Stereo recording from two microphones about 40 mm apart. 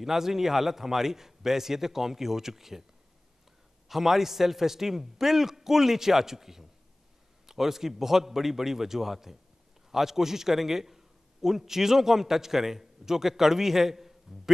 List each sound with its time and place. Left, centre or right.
0.0 s a man's voice: centre
3.9 s a man's voice: centre